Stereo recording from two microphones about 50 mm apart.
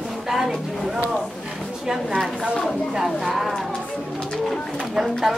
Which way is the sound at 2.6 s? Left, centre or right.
Centre.